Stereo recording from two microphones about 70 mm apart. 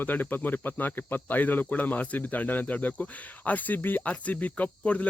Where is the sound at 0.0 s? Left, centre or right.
Left.